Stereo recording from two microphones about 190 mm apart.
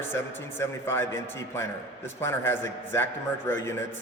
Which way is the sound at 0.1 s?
10° left (ahead or behind).